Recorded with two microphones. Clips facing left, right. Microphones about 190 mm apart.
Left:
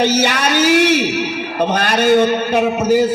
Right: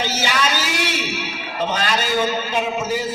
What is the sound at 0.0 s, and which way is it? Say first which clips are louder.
A man's voice: left 7 dB; 45° left (ahead or behind).